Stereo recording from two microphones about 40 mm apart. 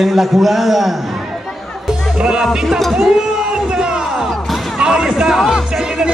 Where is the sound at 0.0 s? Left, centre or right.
Centre.